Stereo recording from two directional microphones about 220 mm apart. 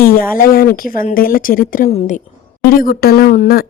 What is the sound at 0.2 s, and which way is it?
Speech, 40° left (ahead or behind).